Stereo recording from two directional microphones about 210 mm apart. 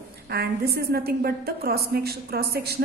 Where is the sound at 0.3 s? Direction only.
50° right (ahead or behind).